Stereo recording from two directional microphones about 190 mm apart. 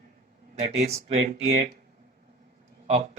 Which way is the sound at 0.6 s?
35° right (ahead or behind).